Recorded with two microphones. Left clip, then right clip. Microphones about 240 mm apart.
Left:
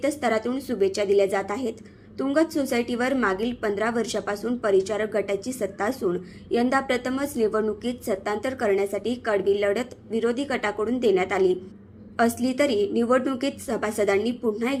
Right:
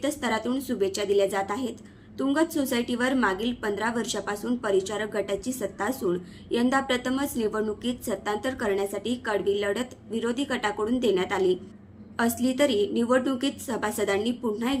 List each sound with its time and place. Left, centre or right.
0.0 s a woman's voice: centre